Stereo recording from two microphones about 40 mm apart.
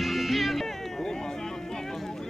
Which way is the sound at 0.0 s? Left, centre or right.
Centre.